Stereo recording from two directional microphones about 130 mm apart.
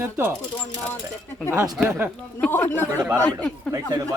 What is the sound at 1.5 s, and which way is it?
Speech, 30° right (ahead or behind).